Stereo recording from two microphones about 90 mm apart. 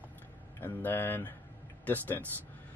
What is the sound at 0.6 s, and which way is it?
Speech, 25° left (ahead or behind).